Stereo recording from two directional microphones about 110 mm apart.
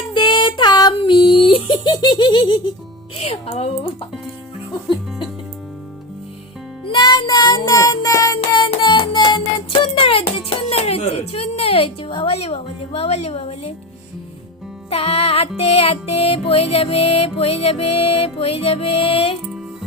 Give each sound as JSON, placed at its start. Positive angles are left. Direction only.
{"t": 0.1, "sound": "a sound", "side_deg": 45}
{"t": 3.2, "sound": "speech", "side_deg": 65}
{"t": 6.8, "sound": "music", "side_deg": 40}
{"t": 8.5, "sound": "music", "side_deg": 40}
{"t": 10.7, "sound": "a woman's voice", "side_deg": 65}
{"t": 14.8, "sound": "music", "side_deg": 65}